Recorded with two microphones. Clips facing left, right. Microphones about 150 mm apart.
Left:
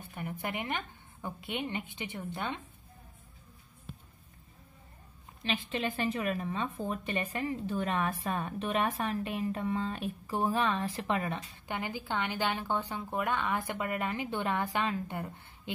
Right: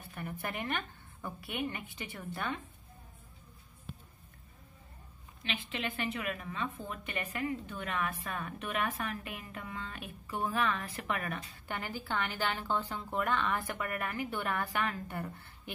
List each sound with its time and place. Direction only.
0.1 s a woman's voice: 15° left (ahead or behind)
5.4 s a woman's voice: 35° left (ahead or behind); by 15.7 s 20° left (ahead or behind)